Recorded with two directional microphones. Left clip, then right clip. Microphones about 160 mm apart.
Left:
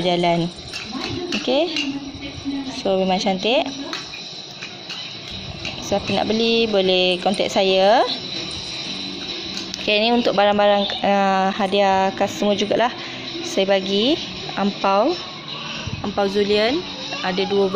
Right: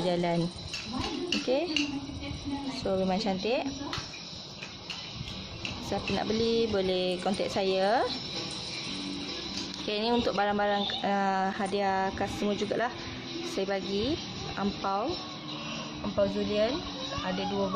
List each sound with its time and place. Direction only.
0.0 s speech: 10° left (ahead or behind)
1.5 s speech: 10° left (ahead or behind)
2.8 s speech: 10° left (ahead or behind)
5.9 s speech: 10° left (ahead or behind)
9.8 s speech: 15° left (ahead or behind)
14.6 s speech: 35° left (ahead or behind)
16.2 s speech: 45° left (ahead or behind)